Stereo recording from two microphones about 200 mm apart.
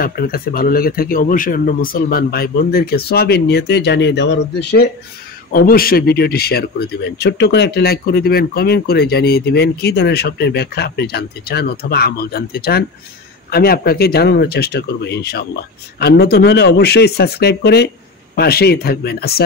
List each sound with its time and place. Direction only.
0.0 s a man's voice: 50° left (ahead or behind)